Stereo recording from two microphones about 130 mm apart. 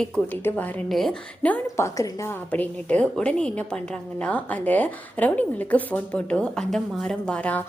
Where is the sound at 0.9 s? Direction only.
Centre (ahead or behind).